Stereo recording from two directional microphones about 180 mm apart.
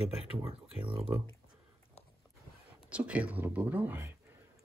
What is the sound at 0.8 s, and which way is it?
Speech, 30° right (ahead or behind).